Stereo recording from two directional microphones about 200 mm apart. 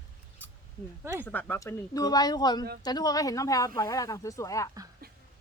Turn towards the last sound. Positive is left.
turn(degrees=15)  # may be behind; listen again after turning